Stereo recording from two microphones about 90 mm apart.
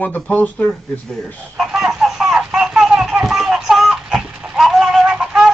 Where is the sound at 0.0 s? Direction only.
15° left (ahead or behind).